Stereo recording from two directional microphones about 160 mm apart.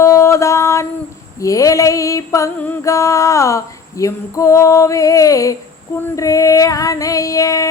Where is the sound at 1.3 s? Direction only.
20° left (ahead or behind).